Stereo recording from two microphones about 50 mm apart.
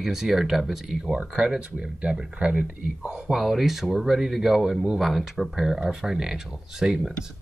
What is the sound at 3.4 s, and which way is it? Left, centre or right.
Speech, centre.